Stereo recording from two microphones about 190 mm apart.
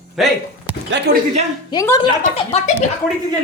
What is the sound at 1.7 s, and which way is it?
Speech, 20° left (ahead or behind).